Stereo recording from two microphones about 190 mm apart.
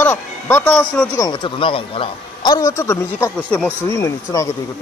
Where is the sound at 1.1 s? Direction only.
20° left (ahead or behind).